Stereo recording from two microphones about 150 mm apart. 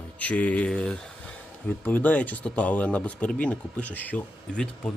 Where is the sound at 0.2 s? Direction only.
10° left (ahead or behind).